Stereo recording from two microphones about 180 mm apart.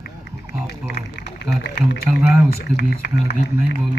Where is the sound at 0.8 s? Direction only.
70° left (ahead or behind).